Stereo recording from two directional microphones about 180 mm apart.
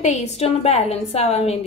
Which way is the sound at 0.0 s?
40° left (ahead or behind).